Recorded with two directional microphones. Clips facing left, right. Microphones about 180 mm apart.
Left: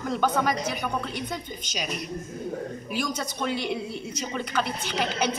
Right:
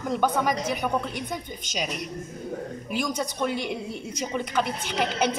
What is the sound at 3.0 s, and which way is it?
Speech, 15° right (ahead or behind).